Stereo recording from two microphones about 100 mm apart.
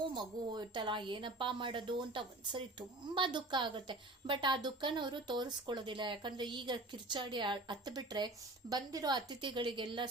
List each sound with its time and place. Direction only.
0.1 s a woman's voice: 50° right (ahead or behind)